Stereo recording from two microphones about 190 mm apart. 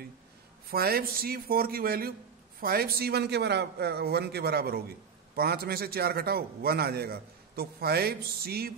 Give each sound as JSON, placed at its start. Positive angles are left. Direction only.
{"t": 0.7, "sound": "a man's voice", "side_deg": -50}